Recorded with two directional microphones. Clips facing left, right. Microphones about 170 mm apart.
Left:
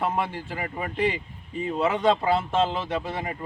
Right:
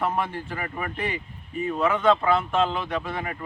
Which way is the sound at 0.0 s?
15° left (ahead or behind).